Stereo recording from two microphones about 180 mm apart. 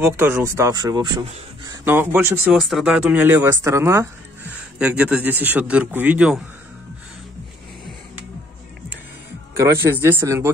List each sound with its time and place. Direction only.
0.0 s speech: 15° right (ahead or behind)
9.6 s speech: 15° right (ahead or behind)